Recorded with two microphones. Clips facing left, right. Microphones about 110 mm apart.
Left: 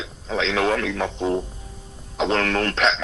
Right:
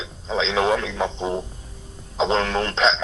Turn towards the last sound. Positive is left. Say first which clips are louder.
# even
turn(degrees=-20)  # may be behind; listen again after turning